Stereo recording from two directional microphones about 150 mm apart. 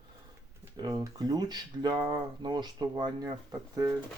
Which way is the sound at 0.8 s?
30° right (ahead or behind).